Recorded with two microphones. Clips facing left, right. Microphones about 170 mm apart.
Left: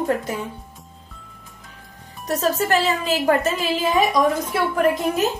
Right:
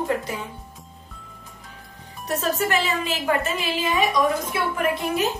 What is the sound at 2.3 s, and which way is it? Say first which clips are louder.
A woman's voice: left 3 dB; 40° left (ahead or behind).